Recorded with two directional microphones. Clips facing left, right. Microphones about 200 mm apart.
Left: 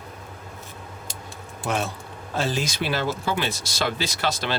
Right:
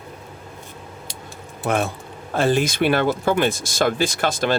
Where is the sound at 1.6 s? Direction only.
55° right (ahead or behind).